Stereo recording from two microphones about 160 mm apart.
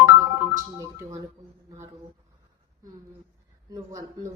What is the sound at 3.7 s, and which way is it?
Speech, 20° right (ahead or behind).